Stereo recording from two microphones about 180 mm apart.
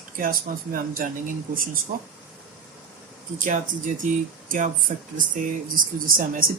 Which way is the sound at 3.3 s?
45° right (ahead or behind).